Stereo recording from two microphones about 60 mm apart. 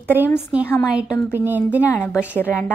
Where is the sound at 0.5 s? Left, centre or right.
Centre.